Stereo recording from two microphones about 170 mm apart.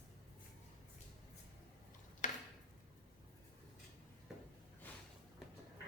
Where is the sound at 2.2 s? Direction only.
45° left (ahead or behind).